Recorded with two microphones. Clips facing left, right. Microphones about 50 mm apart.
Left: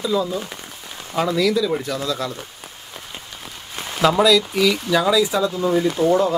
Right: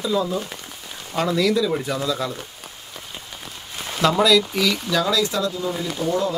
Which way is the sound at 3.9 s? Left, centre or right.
Centre.